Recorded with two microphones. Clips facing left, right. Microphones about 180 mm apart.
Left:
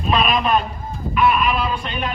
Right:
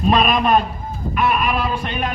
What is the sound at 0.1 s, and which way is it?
A man's voice, 45° right (ahead or behind).